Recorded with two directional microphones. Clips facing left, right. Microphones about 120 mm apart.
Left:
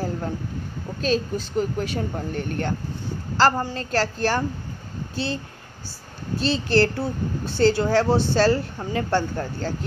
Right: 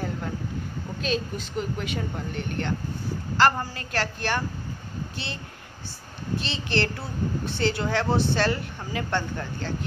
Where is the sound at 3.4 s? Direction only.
30° left (ahead or behind).